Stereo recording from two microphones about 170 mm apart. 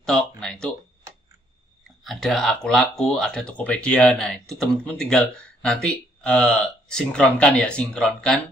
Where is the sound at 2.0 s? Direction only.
Centre (ahead or behind).